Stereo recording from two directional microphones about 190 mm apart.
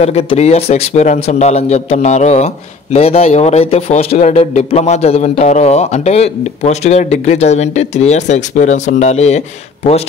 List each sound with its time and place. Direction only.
0.0 s a man's voice: 30° left (ahead or behind)